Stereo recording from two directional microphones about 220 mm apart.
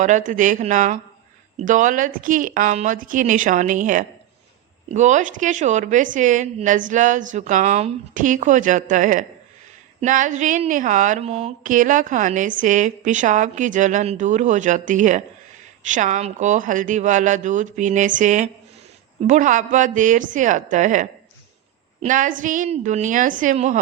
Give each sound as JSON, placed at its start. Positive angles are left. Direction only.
{"t": 0.0, "sound": "speech", "side_deg": -35}